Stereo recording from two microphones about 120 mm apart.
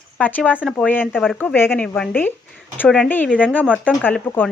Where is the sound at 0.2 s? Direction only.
15° left (ahead or behind).